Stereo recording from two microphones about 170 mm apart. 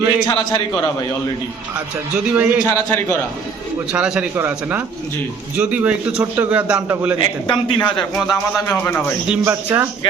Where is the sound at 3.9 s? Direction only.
5° right (ahead or behind).